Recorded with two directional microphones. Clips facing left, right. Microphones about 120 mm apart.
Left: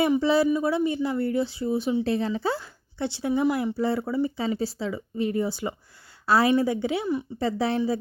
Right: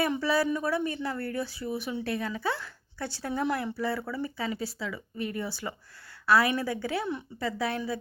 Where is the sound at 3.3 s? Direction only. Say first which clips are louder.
Left 6 dB; 5° left (ahead or behind).